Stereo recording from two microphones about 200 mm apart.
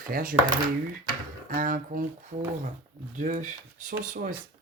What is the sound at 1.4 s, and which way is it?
Speech, 45° right (ahead or behind).